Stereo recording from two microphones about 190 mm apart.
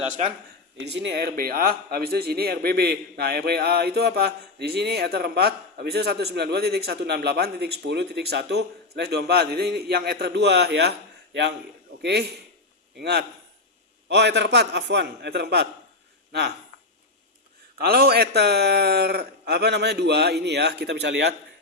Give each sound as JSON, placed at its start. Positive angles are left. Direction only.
{"t": 0.9, "sound": "a man's voice", "side_deg": -65}
{"t": 12.0, "sound": "a man's voice", "side_deg": -60}
{"t": 17.7, "sound": "a man's voice", "side_deg": -55}